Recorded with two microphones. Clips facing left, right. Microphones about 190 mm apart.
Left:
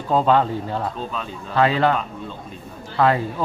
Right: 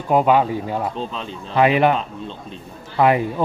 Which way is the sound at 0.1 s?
10° right (ahead or behind).